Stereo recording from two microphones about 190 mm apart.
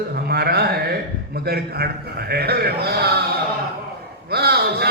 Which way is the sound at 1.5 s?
55° right (ahead or behind).